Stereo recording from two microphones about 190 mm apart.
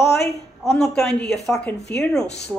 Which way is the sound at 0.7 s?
5° left (ahead or behind).